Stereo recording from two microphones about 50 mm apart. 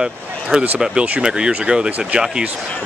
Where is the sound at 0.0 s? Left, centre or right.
Centre.